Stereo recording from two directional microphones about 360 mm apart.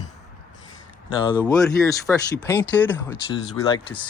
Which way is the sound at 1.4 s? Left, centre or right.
Centre.